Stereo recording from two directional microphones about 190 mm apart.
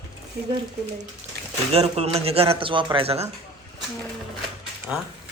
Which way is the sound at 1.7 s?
35° right (ahead or behind).